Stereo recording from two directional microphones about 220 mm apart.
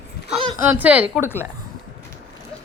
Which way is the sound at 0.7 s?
5° right (ahead or behind).